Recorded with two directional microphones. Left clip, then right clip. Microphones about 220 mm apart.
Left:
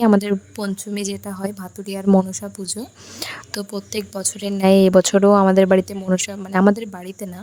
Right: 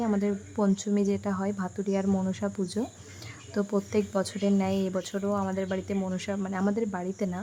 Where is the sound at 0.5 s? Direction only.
Centre (ahead or behind).